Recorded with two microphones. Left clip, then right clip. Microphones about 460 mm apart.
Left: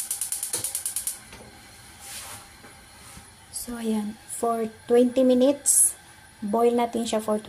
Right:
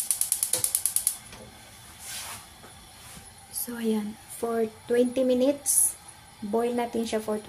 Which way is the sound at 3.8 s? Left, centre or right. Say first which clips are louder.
Right 1 dB; right.